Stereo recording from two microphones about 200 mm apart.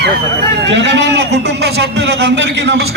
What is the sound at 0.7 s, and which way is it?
A man's voice, 60° right (ahead or behind).